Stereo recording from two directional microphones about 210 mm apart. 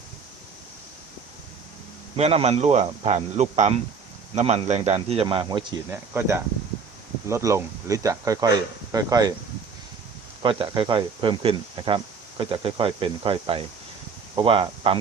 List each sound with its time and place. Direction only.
2.1 s a man's voice: 30° right (ahead or behind)
5.9 s speech: 10° right (ahead or behind)
10.4 s speech: 25° right (ahead or behind)